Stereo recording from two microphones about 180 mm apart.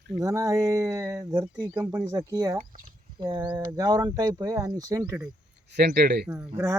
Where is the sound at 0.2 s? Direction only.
15° right (ahead or behind).